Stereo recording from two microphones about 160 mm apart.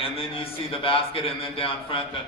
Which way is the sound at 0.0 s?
35° left (ahead or behind).